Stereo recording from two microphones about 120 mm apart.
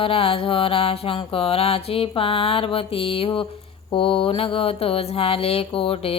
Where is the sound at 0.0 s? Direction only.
50° left (ahead or behind).